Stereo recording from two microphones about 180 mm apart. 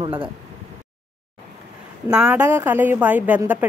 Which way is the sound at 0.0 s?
30° right (ahead or behind).